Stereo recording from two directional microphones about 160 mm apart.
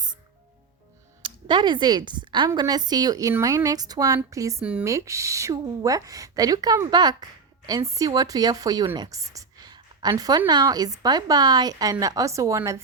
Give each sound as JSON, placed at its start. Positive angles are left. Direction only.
{"t": 1.2, "sound": "a woman's voice", "side_deg": -30}